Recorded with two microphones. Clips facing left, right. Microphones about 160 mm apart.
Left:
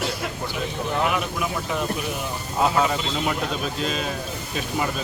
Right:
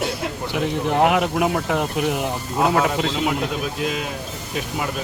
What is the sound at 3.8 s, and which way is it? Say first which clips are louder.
Speech: right 2 dB; 10° right (ahead or behind).